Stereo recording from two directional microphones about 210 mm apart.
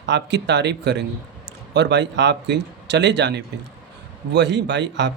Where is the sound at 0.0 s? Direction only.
55° right (ahead or behind).